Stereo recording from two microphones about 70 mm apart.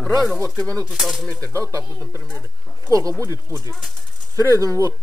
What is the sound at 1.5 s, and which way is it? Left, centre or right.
Speech, right.